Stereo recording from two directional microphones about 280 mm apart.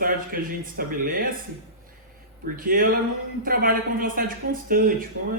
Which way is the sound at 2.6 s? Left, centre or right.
Right.